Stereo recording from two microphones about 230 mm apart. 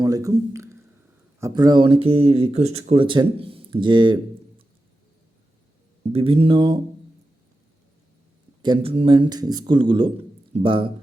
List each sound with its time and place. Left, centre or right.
0.0 s a sound: centre
1.4 s speech: centre
6.1 s speech: right
8.6 s speech: right